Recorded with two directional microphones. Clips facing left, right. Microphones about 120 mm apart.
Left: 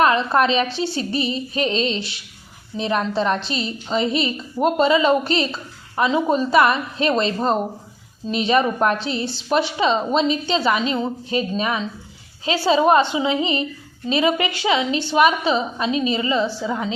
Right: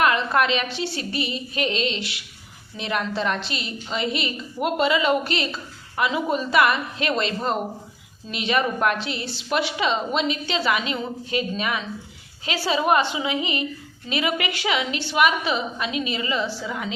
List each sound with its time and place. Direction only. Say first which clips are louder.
0.0 s a woman's voice: left 4 dB; 30° left (ahead or behind)